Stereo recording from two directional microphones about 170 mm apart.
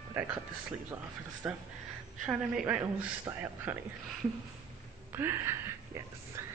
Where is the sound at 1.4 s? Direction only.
10° right (ahead or behind).